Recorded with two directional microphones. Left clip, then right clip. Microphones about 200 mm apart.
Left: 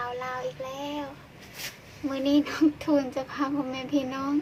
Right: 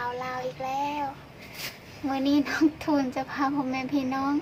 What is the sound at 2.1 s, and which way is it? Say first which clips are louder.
A child's voice: even; 5° left (ahead or behind).